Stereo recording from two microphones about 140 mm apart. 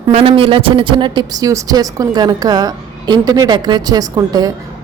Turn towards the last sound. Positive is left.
turn(degrees=-25)  # may be behind; listen again after turning